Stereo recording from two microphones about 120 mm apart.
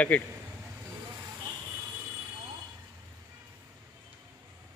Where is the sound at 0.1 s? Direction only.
10° left (ahead or behind).